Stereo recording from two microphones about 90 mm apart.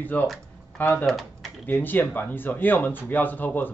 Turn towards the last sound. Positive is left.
turn(degrees=20)  # may be behind; listen again after turning